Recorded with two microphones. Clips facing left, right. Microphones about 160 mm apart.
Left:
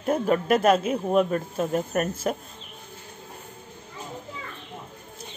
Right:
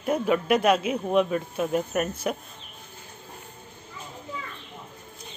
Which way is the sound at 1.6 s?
5° right (ahead or behind).